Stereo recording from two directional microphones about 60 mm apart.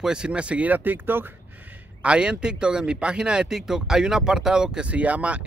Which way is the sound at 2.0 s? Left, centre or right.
Centre.